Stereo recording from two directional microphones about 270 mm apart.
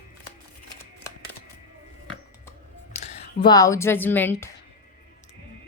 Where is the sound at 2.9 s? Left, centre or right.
Left.